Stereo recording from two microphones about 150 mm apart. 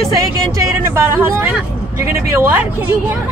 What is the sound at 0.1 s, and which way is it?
Speech, 20° right (ahead or behind).